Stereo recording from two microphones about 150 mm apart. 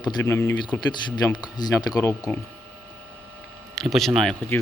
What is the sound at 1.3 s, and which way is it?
Speech, 30° left (ahead or behind).